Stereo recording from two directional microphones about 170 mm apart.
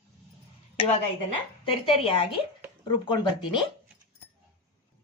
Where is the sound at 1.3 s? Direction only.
35° left (ahead or behind).